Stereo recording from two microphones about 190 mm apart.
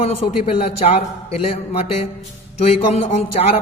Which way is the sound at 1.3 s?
30° left (ahead or behind).